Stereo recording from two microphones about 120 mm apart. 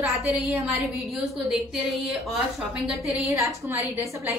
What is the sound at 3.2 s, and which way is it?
Speech, 25° right (ahead or behind).